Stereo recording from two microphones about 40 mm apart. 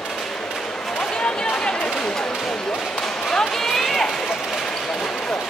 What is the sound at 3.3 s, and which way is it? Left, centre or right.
Run, centre.